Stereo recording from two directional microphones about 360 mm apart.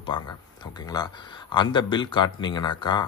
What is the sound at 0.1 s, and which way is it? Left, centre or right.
Speech, centre.